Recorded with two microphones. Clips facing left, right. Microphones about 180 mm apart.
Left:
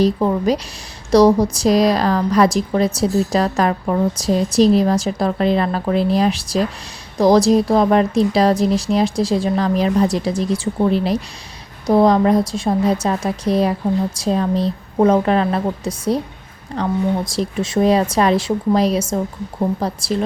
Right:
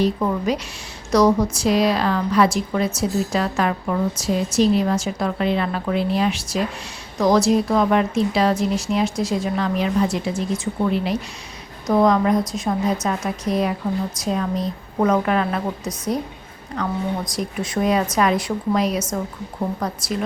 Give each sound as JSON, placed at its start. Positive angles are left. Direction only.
{"t": 0.0, "sound": "a woman's voice", "side_deg": 35}
{"t": 17.3, "sound": "a woman's voice", "side_deg": 25}